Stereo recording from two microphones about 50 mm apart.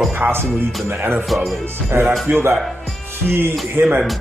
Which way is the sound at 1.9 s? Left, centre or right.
Right.